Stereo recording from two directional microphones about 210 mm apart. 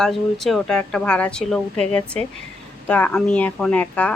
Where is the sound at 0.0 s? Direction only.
Centre (ahead or behind).